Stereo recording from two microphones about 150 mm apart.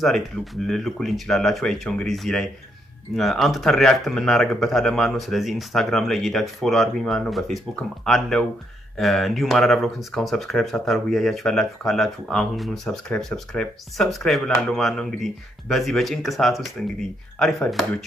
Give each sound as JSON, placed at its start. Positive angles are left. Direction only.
{"t": 0.3, "sound": "speech", "side_deg": 0}